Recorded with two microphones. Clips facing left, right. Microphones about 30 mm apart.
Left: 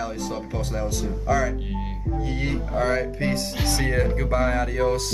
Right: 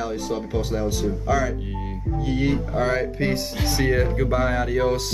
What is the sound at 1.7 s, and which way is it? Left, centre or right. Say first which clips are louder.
Music: even; centre.